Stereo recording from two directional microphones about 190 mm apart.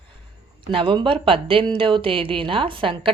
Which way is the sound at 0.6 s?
25° right (ahead or behind).